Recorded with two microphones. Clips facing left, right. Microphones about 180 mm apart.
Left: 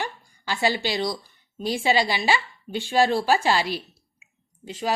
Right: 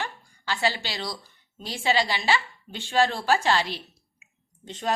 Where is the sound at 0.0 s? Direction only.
15° left (ahead or behind).